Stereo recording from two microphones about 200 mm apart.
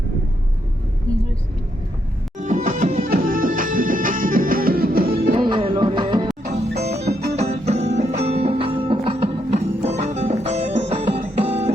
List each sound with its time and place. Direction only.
2.4 s music: 40° right (ahead or behind)
5.4 s music: 25° right (ahead or behind)